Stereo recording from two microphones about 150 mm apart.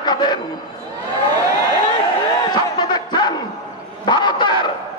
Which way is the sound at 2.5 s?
30° left (ahead or behind).